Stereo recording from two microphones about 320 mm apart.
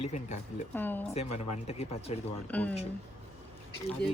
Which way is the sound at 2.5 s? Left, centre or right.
Centre.